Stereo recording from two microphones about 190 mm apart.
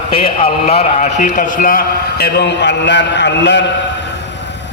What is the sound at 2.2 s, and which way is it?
A man's voice, 60° left (ahead or behind).